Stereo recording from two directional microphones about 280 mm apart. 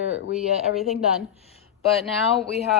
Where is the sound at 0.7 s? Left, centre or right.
Centre.